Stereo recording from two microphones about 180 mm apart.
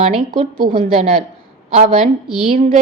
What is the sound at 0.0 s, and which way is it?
A woman's voice, 40° right (ahead or behind).